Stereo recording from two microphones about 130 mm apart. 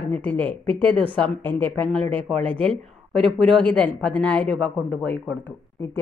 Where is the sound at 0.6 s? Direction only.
40° right (ahead or behind).